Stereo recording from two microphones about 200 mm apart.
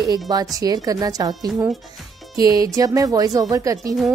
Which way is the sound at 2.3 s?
20° right (ahead or behind).